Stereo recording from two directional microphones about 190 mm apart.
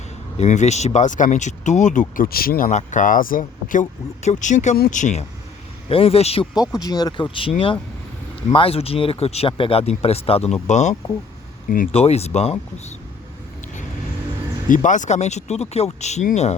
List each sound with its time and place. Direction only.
0.3 s speech: 35° left (ahead or behind)
5.9 s speech: 30° left (ahead or behind)
6.7 s speech: 20° left (ahead or behind)
14.7 s speech: 40° left (ahead or behind)